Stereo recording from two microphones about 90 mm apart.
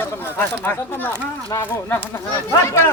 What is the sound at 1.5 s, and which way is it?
Speech, 40° left (ahead or behind).